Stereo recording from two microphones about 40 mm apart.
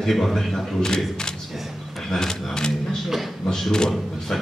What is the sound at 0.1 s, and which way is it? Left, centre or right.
Speech, centre.